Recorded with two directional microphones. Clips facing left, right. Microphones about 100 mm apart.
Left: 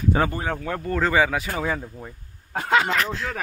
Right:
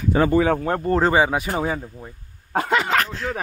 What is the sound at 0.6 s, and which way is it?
Speech, 35° right (ahead or behind).